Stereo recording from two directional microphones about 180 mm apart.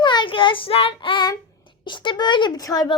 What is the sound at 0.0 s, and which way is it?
Child singing, 25° left (ahead or behind).